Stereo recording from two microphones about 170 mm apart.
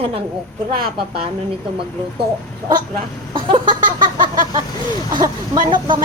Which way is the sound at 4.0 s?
50° right (ahead or behind).